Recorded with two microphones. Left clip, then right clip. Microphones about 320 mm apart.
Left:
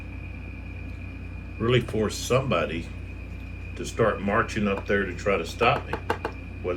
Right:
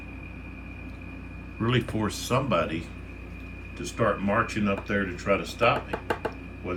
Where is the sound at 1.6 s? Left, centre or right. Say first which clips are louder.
Left 4 dB; centre.